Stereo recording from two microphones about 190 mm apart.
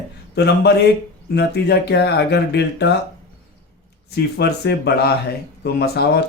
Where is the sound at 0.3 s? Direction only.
60° left (ahead or behind).